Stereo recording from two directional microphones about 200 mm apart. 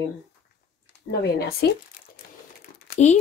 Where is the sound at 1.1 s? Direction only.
55° left (ahead or behind).